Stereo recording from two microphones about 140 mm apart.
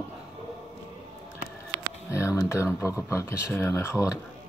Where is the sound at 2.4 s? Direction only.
20° left (ahead or behind).